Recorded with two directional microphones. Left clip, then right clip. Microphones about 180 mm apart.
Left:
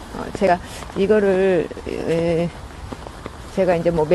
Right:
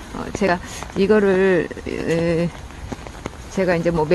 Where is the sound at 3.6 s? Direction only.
15° right (ahead or behind).